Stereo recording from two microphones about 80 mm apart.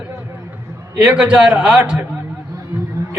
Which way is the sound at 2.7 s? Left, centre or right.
Right.